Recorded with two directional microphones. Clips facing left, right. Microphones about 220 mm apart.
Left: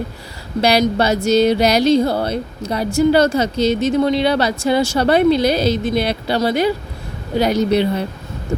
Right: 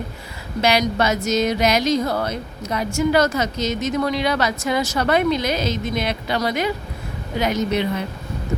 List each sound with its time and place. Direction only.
0.6 s speech: 35° left (ahead or behind)